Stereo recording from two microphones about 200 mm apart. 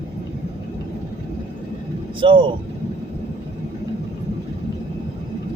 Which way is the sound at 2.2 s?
25° right (ahead or behind).